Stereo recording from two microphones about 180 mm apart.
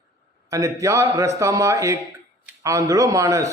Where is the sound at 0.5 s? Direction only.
15° right (ahead or behind).